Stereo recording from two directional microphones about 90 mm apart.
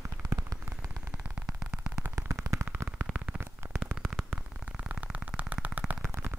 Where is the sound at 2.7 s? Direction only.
20° right (ahead or behind).